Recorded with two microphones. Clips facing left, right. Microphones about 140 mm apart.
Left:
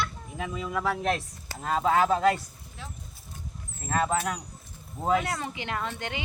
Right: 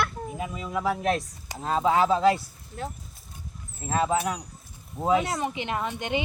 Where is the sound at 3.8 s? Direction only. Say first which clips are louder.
Right 2 dB; 10° right (ahead or behind).